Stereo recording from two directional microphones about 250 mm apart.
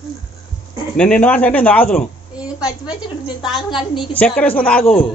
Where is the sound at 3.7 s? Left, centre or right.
Centre.